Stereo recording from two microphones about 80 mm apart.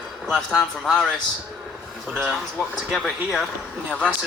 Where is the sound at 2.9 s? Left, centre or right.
Centre.